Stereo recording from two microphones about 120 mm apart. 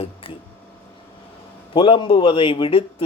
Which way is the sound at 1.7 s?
45° left (ahead or behind).